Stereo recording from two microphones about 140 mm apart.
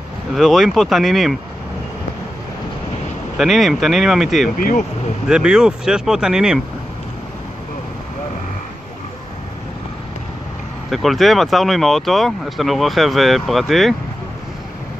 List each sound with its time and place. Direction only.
0.3 s speech: centre (ahead or behind)
3.3 s speech: centre (ahead or behind)
4.6 s speech: 85° left
5.3 s speech: 5° right (ahead or behind)
10.9 s speech: centre (ahead or behind)